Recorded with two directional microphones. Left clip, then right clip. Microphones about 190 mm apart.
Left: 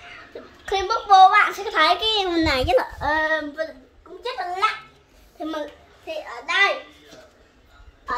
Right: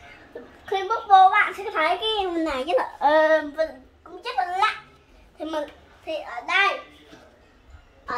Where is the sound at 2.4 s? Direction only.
15° left (ahead or behind).